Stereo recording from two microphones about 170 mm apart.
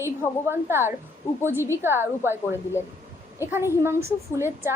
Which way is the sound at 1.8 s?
15° right (ahead or behind).